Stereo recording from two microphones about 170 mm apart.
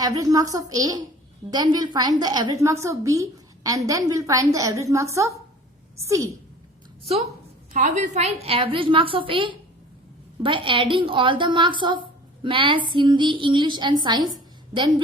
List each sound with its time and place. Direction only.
0.0 s a woman's voice: 20° right (ahead or behind)
7.0 s a woman's voice: 35° right (ahead or behind)